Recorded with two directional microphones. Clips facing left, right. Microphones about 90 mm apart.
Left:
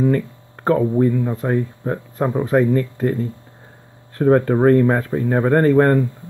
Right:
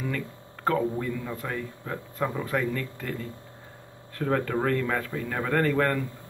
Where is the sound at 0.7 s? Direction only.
40° left (ahead or behind).